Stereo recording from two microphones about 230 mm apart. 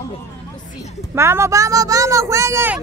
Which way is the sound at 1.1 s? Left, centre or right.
Centre.